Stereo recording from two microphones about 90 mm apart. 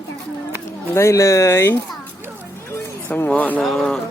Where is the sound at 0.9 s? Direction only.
30° left (ahead or behind).